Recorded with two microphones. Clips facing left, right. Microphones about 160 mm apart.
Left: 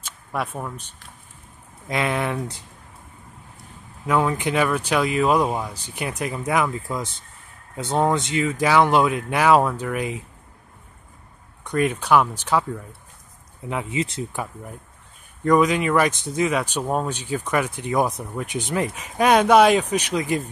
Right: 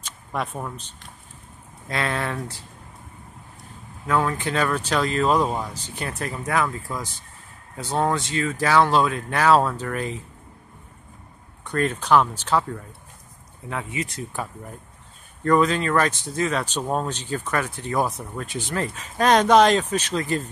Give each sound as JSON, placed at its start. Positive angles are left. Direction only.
{"t": 0.0, "sound": "speech", "side_deg": 5}
{"t": 1.9, "sound": "speech", "side_deg": 15}
{"t": 4.1, "sound": "speech", "side_deg": 20}
{"t": 11.6, "sound": "speech", "side_deg": 15}
{"t": 13.7, "sound": "speech", "side_deg": 20}
{"t": 15.4, "sound": "speech", "side_deg": 15}